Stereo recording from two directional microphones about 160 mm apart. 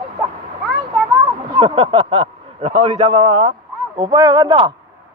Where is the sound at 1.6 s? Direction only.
35° right (ahead or behind).